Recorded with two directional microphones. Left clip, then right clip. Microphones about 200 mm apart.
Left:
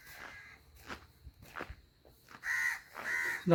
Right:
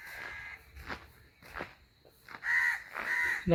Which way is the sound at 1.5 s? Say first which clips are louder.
Right 2 dB; 15° right (ahead or behind).